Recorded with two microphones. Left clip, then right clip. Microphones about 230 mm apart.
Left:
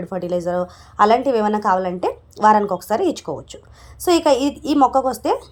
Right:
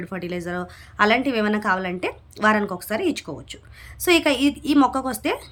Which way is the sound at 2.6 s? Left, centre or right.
Centre.